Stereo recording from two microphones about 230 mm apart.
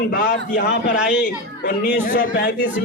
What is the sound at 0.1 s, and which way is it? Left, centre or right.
A man's voice, left.